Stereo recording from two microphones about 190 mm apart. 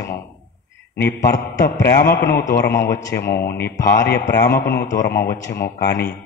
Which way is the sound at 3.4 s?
55° left (ahead or behind).